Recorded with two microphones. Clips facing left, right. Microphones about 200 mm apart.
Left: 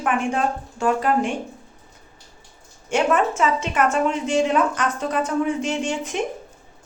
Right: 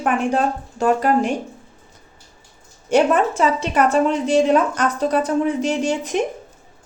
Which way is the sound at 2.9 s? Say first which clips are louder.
Right 4 dB; 35° right (ahead or behind).